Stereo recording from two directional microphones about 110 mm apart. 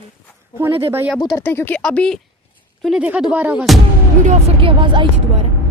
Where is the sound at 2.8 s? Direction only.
5° right (ahead or behind).